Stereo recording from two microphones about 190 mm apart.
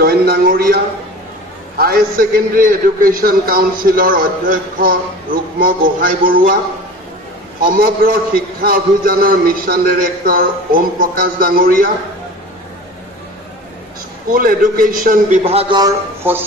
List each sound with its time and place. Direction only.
0.0 s a man's voice: 55° right (ahead or behind)
1.8 s a man's voice: 50° right (ahead or behind)
7.7 s a man's voice: 50° right (ahead or behind)
14.3 s a man's voice: 50° right (ahead or behind)
15.4 s a man's voice: 25° right (ahead or behind)
16.2 s speech: 10° right (ahead or behind)